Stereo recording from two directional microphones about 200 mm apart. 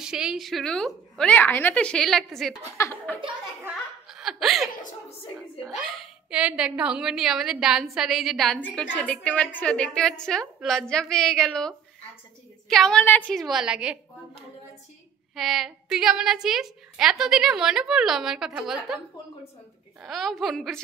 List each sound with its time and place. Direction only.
0.0 s a woman's voice: 5° right (ahead or behind)
2.8 s speech: 10° left (ahead or behind)
3.6 s laughter: centre (ahead or behind)
5.9 s a woman's voice: centre (ahead or behind)
15.3 s a woman's voice: centre (ahead or behind)
20.0 s a woman's voice: centre (ahead or behind)